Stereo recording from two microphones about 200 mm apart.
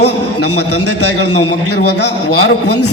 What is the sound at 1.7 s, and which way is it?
Speech, 55° left (ahead or behind).